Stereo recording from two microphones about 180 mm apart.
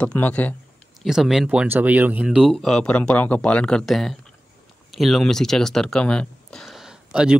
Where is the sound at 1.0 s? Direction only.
Centre (ahead or behind).